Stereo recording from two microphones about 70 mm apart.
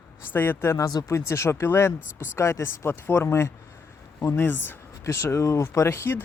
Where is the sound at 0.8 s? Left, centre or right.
Left.